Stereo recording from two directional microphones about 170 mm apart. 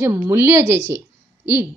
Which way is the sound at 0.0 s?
15° right (ahead or behind).